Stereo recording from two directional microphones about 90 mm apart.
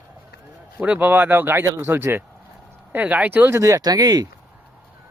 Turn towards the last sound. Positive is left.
turn(degrees=-45)  # may be behind; listen again after turning